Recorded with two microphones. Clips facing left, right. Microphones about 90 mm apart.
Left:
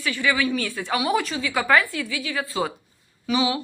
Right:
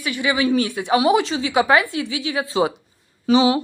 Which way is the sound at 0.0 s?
20° right (ahead or behind).